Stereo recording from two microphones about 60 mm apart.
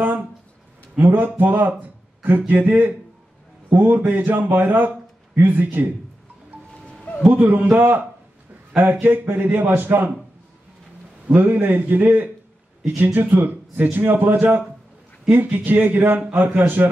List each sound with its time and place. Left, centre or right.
0.9 s a man's voice: right
6.5 s music: right
7.2 s a man's voice: right
9.0 s a man's voice: right
11.2 s a man's voice: right
15.3 s a man's voice: right